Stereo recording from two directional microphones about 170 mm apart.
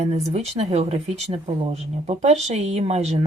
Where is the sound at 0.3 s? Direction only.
40° right (ahead or behind).